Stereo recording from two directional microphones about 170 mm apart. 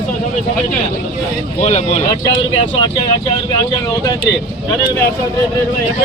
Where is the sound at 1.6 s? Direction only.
40° left (ahead or behind).